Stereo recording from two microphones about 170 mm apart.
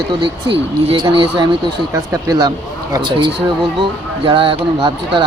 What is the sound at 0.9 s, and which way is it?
Speech, 30° right (ahead or behind).